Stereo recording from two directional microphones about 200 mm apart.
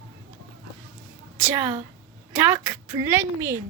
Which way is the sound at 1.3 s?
10° right (ahead or behind).